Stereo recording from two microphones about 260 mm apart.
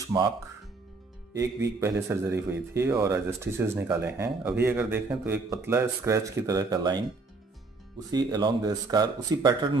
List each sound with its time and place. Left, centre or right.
0.1 s a man's voice: centre
1.3 s a man's voice: centre
8.1 s a man's voice: centre